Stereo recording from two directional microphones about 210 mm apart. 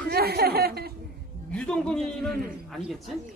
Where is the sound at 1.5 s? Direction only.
5° left (ahead or behind).